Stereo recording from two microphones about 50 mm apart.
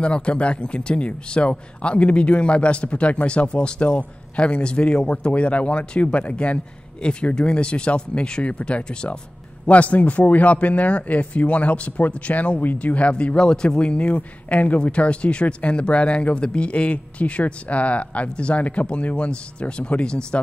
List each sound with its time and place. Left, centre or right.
0.0 s speech: left